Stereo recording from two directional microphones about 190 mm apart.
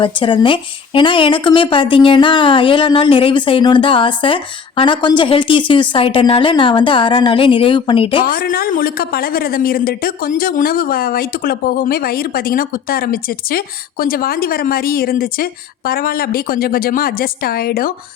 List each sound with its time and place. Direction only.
0.0 s a woman's voice: 25° left (ahead or behind)
8.2 s speech: 50° left (ahead or behind)